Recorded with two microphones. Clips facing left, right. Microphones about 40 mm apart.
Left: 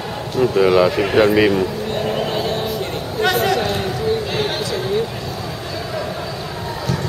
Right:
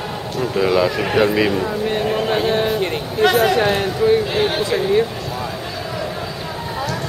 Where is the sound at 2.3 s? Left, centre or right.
Right.